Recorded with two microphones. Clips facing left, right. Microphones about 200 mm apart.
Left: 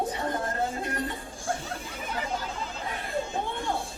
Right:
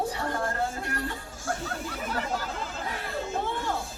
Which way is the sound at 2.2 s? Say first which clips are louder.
Left 1 dB; centre (ahead or behind).